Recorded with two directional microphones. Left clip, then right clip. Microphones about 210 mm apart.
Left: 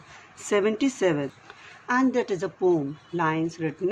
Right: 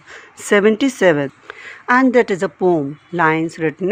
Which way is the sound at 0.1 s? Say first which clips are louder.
Right 10 dB; 45° right (ahead or behind).